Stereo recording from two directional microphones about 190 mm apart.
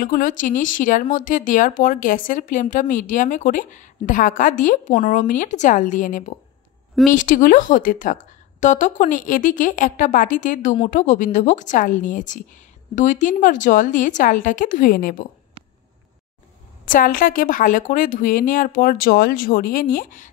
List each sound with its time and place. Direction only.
0.0 s a woman's voice: 45° left (ahead or behind)
16.8 s speech: 45° left (ahead or behind)